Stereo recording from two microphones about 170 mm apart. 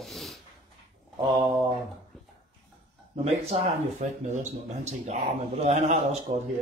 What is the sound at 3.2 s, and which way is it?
Speech, 35° right (ahead or behind).